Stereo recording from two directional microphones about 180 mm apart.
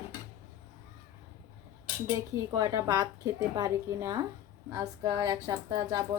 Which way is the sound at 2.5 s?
15° right (ahead or behind).